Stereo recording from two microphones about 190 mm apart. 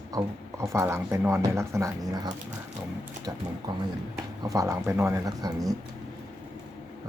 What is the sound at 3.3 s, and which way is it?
Speech, 15° right (ahead or behind).